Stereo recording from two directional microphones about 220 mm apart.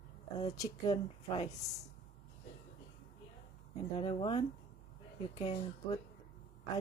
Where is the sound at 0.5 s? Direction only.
15° left (ahead or behind).